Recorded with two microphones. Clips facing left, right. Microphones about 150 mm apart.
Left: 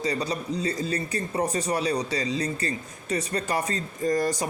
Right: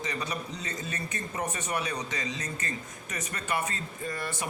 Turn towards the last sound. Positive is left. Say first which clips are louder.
# left 10 dB
turn(degrees=40)  # may be behind; listen again after turning